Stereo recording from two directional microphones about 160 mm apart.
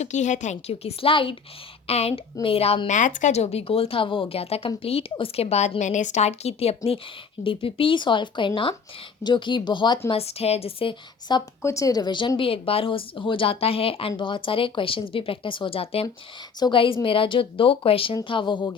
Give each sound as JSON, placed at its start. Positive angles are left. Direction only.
{"t": 0.0, "sound": "a woman's voice", "side_deg": 50}
{"t": 10.1, "sound": "a woman's voice", "side_deg": 40}
{"t": 11.6, "sound": "a woman's voice", "side_deg": 20}